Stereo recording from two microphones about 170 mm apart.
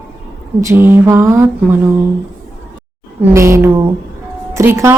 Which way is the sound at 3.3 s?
15° right (ahead or behind).